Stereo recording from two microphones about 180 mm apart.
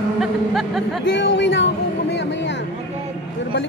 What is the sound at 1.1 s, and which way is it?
Speech, 85° left.